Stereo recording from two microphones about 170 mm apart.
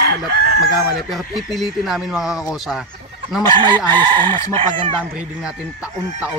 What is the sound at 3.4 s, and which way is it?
Chicken, 25° right (ahead or behind).